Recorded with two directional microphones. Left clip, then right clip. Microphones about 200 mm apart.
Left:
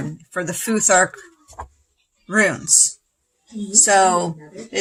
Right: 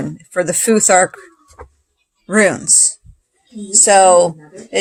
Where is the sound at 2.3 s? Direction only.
30° right (ahead or behind).